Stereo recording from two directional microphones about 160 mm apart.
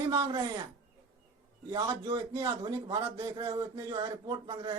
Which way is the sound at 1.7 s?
25° right (ahead or behind).